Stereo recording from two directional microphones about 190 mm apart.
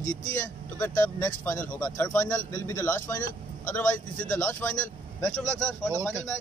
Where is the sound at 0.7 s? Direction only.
10° left (ahead or behind).